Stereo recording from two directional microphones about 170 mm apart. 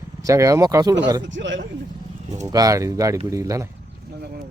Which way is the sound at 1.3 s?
90° right.